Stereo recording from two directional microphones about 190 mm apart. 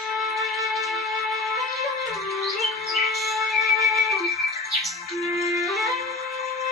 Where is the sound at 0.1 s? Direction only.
Centre (ahead or behind).